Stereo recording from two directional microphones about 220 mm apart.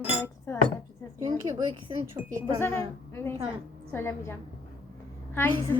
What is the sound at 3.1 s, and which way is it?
A woman's voice, 10° left (ahead or behind).